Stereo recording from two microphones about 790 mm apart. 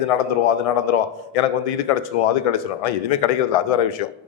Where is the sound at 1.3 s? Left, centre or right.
Left.